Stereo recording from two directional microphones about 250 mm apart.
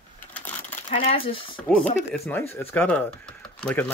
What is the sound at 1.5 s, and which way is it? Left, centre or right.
Speech, centre.